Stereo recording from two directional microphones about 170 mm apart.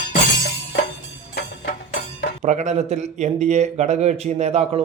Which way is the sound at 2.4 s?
45° right (ahead or behind).